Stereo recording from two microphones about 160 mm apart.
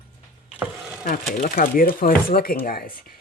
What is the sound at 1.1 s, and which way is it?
Speech, 60° left (ahead or behind).